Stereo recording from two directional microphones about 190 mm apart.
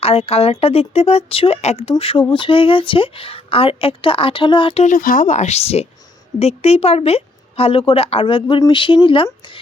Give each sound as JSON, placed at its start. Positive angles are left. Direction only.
{"t": 0.0, "sound": "a woman's voice", "side_deg": 30}